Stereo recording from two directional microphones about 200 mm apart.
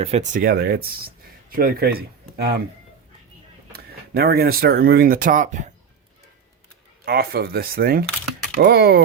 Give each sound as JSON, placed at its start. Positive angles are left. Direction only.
{"t": 0.0, "sound": "speech", "side_deg": -35}
{"t": 3.7, "sound": "speech", "side_deg": -50}
{"t": 7.0, "sound": "speech", "side_deg": -50}